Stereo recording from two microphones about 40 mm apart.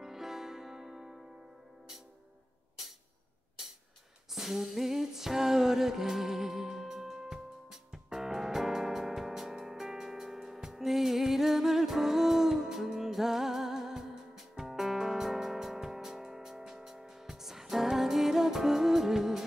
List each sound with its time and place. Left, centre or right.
0.0 s music: centre
4.3 s music: centre